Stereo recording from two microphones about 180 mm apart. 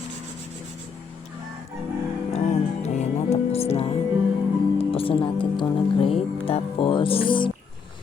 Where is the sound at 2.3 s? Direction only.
40° left (ahead or behind).